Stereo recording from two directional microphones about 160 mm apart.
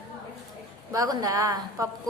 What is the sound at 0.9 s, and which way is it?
Speech, 25° right (ahead or behind).